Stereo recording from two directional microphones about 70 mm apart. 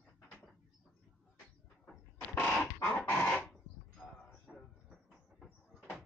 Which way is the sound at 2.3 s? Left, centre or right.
Left.